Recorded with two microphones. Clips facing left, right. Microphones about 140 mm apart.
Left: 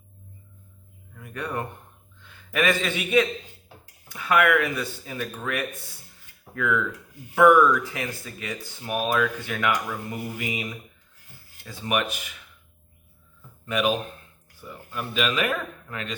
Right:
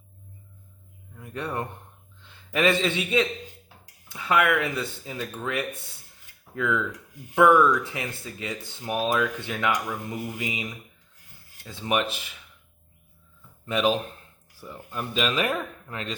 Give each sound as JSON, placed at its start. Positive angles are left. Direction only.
{"t": 1.1, "sound": "a man's voice", "side_deg": -25}
{"t": 13.7, "sound": "speech", "side_deg": -30}